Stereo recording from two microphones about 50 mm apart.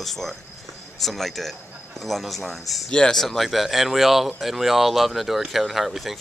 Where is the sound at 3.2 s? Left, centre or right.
Centre.